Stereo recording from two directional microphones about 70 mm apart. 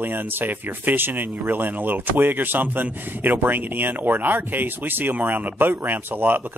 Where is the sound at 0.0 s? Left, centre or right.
Right.